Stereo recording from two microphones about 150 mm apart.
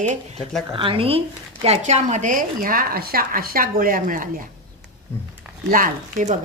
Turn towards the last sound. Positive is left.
turn(degrees=-60)  # may be behind; listen again after turning